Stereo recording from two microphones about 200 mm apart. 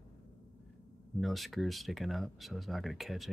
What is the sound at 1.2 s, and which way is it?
Speech, centre (ahead or behind).